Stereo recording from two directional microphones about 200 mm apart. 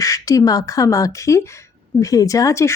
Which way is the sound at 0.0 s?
15° left (ahead or behind).